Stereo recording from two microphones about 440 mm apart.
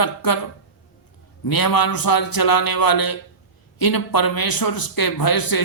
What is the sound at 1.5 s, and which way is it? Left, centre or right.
Speech, left.